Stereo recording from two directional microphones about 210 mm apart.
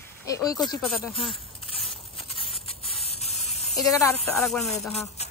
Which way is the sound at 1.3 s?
25° left (ahead or behind).